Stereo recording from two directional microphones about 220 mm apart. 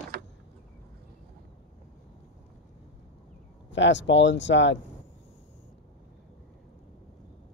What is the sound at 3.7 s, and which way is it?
Speech, 55° left (ahead or behind).